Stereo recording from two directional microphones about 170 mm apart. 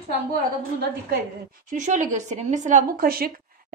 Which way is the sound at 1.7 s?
45° right (ahead or behind).